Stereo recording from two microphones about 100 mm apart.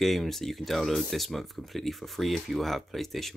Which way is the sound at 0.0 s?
Centre (ahead or behind).